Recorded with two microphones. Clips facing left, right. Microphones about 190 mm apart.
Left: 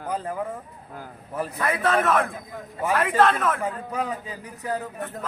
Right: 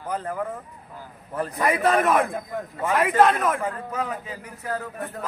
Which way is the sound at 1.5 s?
10° right (ahead or behind).